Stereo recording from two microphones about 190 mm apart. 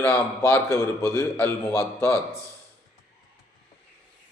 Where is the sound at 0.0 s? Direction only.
15° left (ahead or behind).